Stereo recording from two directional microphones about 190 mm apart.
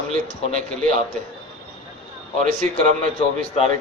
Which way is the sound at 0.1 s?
40° right (ahead or behind).